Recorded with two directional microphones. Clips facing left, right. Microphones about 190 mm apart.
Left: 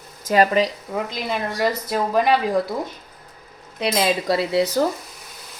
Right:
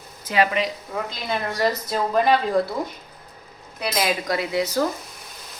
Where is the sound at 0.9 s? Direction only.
10° left (ahead or behind).